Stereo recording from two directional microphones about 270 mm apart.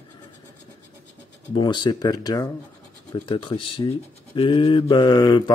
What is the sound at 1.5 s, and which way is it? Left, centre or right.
Speech, centre.